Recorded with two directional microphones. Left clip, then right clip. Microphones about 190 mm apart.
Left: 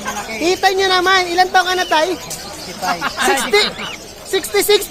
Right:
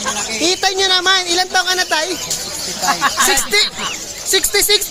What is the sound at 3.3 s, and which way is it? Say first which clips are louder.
Speech: left 1 dB; centre (ahead or behind).